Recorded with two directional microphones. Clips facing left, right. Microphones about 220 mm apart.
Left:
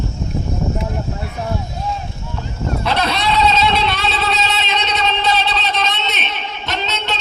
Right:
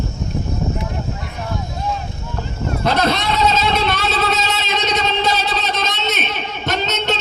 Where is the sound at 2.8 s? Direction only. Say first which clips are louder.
Right 2 dB; 45° right (ahead or behind).